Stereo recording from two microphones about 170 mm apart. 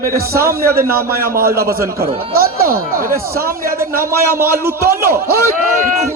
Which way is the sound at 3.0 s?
60° right (ahead or behind).